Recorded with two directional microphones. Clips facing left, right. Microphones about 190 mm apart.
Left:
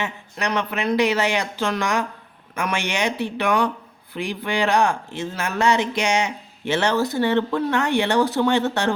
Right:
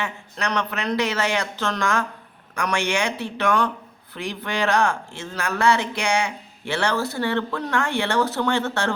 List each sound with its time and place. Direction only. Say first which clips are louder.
0.0 s speech: left 1 dB; 15° left (ahead or behind)